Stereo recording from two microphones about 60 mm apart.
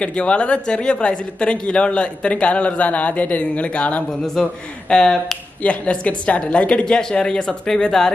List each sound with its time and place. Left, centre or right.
0.0 s a woman's voice: centre